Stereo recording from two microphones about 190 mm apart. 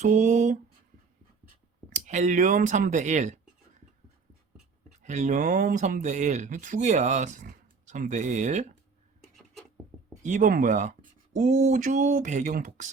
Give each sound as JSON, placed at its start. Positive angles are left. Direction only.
{"t": 0.0, "sound": "speech", "side_deg": -40}
{"t": 1.9, "sound": "speech", "side_deg": -40}
{"t": 5.0, "sound": "speech", "side_deg": -40}
{"t": 9.2, "sound": "a sound", "side_deg": 0}
{"t": 10.2, "sound": "speech", "side_deg": -40}